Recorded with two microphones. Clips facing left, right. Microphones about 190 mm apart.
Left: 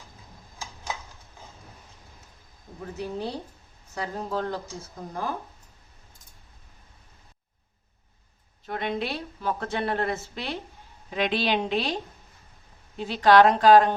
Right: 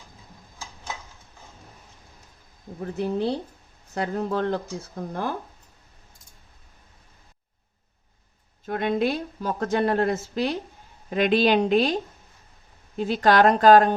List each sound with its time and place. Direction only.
2.8 s speech: 55° right (ahead or behind)
8.6 s a woman's voice: 45° right (ahead or behind)
13.0 s a woman's voice: 45° right (ahead or behind)